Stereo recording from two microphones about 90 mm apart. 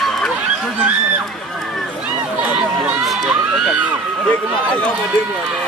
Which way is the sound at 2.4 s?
15° right (ahead or behind).